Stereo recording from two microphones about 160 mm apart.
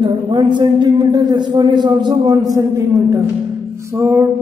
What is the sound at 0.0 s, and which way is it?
A man's voice, 25° right (ahead or behind).